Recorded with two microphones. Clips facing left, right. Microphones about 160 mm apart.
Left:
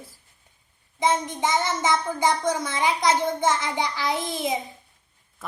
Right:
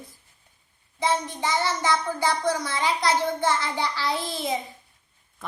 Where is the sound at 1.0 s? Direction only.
20° left (ahead or behind).